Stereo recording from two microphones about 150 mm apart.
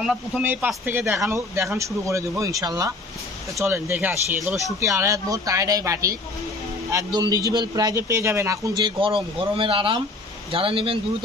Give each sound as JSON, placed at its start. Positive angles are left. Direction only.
{"t": 0.0, "sound": "a man's voice", "side_deg": -5}
{"t": 3.6, "sound": "a man's voice", "side_deg": -15}